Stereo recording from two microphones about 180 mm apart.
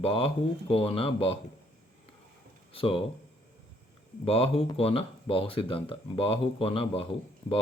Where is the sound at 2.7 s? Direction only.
30° left (ahead or behind).